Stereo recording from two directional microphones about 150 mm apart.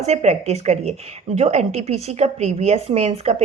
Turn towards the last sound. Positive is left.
turn(degrees=-45)  # may be behind; listen again after turning